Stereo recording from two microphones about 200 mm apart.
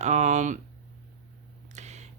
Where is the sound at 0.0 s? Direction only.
35° right (ahead or behind).